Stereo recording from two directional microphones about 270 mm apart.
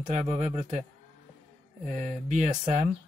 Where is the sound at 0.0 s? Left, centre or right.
Right.